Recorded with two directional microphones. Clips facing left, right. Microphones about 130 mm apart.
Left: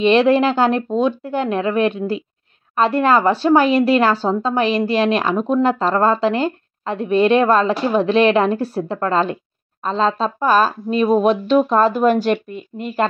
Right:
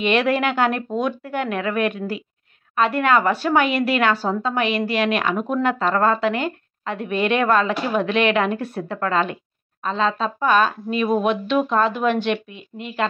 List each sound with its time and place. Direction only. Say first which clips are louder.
0.0 s a woman's voice: left 6 dB; 30° left (ahead or behind)